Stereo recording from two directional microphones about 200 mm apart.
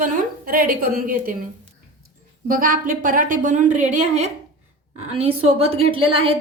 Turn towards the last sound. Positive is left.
turn(degrees=-25)  # may be behind; listen again after turning